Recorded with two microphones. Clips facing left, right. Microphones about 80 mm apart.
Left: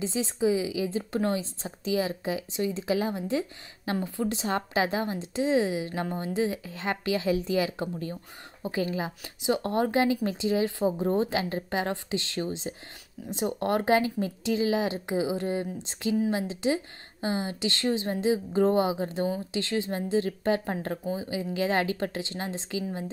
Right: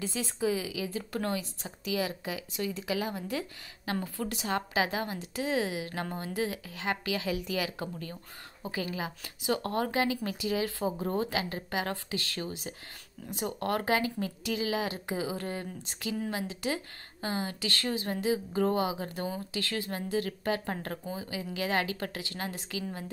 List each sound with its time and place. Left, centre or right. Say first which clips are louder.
0.0 s speech: left 5 dB; left